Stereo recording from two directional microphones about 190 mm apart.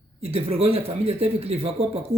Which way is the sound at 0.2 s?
30° right (ahead or behind).